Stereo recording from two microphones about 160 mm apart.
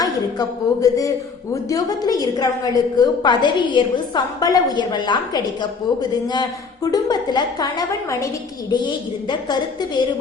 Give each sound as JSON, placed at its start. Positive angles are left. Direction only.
{"t": 0.0, "sound": "a woman's voice", "side_deg": 20}